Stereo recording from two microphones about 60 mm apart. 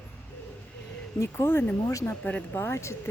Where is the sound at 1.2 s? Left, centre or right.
Left.